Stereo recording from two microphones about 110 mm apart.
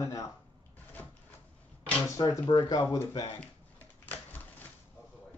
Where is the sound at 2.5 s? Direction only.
40° left (ahead or behind).